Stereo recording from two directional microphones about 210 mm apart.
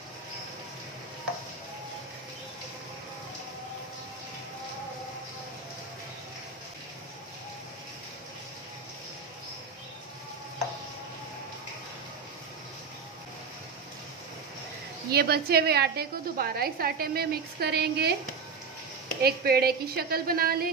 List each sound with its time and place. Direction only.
15.0 s a woman's voice: 50° right (ahead or behind)
19.2 s a woman's voice: 50° right (ahead or behind)